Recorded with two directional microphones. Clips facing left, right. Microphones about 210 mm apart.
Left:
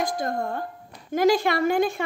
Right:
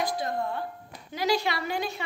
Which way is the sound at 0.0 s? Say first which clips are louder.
Left 3 dB; 45° left (ahead or behind).